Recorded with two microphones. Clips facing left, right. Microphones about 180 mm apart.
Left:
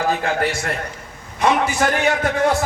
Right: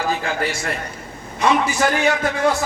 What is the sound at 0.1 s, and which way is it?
Speech, 55° left (ahead or behind).